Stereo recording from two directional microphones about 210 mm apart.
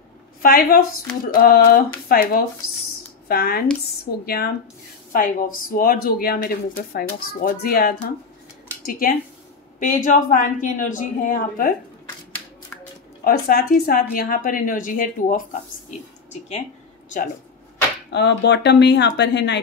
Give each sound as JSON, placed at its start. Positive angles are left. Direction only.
{"t": 0.4, "sound": "a woman's voice", "side_deg": 45}
{"t": 9.8, "sound": "a woman's voice", "side_deg": 40}
{"t": 13.2, "sound": "a woman's voice", "side_deg": 45}
{"t": 18.1, "sound": "speech", "side_deg": 55}